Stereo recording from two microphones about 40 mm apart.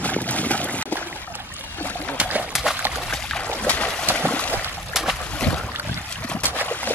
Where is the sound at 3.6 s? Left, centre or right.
Left.